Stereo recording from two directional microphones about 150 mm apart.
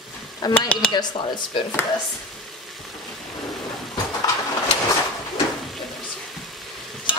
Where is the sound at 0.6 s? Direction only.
5° left (ahead or behind).